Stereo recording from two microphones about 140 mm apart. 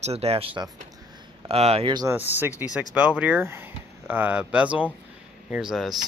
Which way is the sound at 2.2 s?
15° right (ahead or behind).